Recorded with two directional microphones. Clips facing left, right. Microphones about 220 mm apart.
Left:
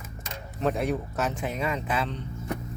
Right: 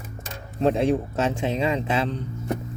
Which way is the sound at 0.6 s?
30° right (ahead or behind).